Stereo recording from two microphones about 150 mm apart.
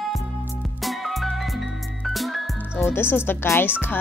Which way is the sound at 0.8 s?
Centre (ahead or behind).